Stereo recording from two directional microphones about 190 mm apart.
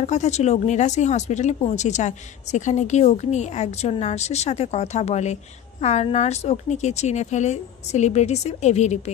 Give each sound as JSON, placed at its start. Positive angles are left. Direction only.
{"t": 0.0, "sound": "speech", "side_deg": 35}